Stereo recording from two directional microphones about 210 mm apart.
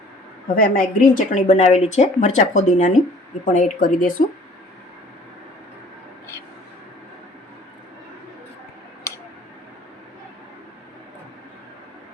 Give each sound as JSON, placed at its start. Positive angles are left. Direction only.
{"t": 0.5, "sound": "a woman's voice", "side_deg": 40}